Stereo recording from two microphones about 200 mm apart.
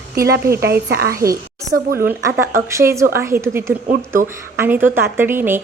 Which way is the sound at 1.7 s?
10° right (ahead or behind).